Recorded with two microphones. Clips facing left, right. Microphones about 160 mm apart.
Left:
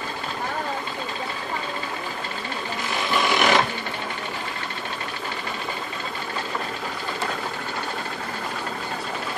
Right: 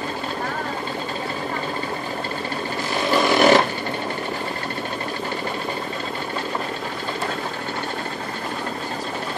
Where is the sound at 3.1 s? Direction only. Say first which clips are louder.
Right 6 dB; 40° right (ahead or behind).